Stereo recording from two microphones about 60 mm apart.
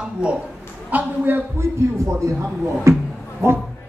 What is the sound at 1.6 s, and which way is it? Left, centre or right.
A man's voice, right.